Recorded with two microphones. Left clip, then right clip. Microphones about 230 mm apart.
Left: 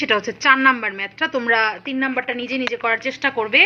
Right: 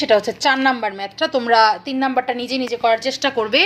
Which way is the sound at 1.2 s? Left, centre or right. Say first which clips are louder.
Right 4 dB; left.